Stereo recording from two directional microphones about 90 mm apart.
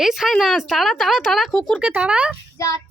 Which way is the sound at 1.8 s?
15° right (ahead or behind).